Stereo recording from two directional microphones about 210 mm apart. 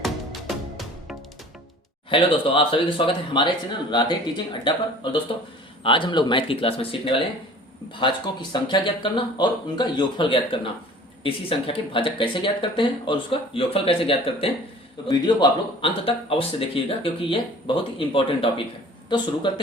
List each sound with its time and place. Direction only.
0.0 s music: centre (ahead or behind)
2.0 s speech: 25° left (ahead or behind)
4.7 s speech: 20° left (ahead or behind)